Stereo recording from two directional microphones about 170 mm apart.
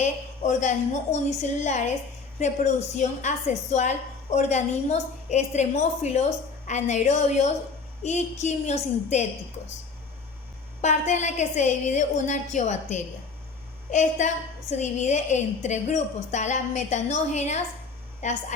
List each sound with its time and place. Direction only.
0.0 s a woman's voice: 45° left (ahead or behind)
10.8 s a woman's voice: 45° left (ahead or behind)